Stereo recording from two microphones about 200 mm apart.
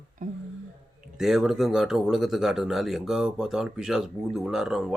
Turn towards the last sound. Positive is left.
turn(degrees=-5)  # may be behind; listen again after turning